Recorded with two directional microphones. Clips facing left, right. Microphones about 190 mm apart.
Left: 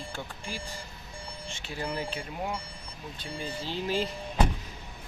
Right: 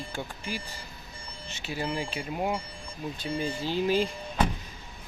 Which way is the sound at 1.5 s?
10° right (ahead or behind).